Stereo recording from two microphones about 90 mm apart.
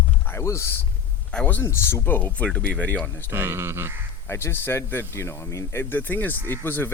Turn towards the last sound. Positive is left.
turn(degrees=25)  # may be behind; listen again after turning